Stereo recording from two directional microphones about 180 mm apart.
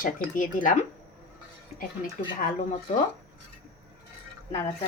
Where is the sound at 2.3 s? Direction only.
50° left (ahead or behind).